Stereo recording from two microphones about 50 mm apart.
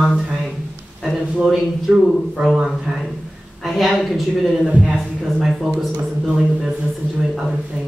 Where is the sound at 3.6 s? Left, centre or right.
Centre.